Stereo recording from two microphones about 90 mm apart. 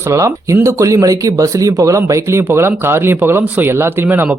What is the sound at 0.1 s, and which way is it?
Speech, 35° right (ahead or behind).